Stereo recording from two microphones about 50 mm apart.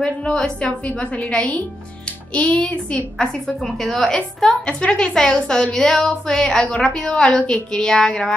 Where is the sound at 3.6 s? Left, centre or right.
Centre.